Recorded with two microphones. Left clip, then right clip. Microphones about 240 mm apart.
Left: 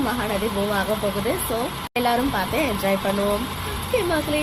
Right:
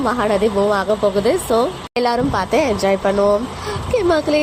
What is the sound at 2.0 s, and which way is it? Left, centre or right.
Speech, right.